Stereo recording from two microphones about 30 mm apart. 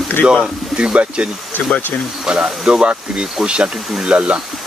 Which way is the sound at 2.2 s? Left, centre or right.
Right.